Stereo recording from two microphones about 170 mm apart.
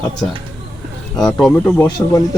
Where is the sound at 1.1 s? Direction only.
5° left (ahead or behind).